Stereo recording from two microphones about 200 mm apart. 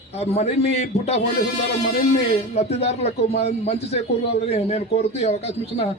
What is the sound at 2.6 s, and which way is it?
Speech, 35° left (ahead or behind).